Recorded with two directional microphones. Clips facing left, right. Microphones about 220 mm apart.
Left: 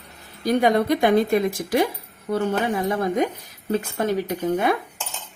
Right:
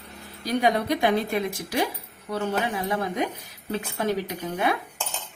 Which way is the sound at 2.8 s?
45° left (ahead or behind).